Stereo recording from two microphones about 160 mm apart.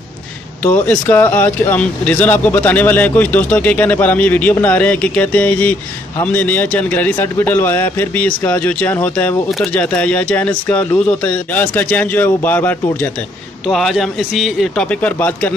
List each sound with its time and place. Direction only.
0.7 s speech: 10° left (ahead or behind)
13.7 s a man's voice: centre (ahead or behind)